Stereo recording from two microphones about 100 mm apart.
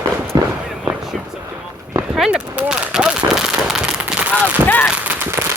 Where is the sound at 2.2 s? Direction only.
10° right (ahead or behind).